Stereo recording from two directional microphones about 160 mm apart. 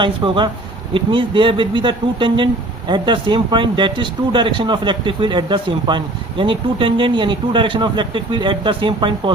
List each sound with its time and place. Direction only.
0.0 s speech: 30° right (ahead or behind)